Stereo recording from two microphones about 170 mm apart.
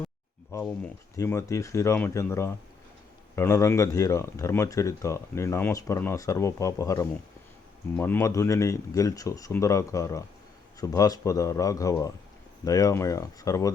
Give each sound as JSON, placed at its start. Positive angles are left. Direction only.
{"t": 0.5, "sound": "speech", "side_deg": 15}